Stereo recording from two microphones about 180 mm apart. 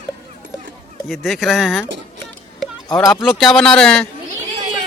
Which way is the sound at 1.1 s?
Centre (ahead or behind).